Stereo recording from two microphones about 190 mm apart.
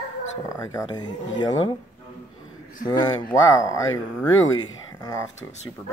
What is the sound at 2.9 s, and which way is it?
Speech, 20° left (ahead or behind).